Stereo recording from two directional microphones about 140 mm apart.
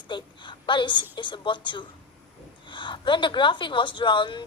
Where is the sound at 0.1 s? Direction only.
35° left (ahead or behind).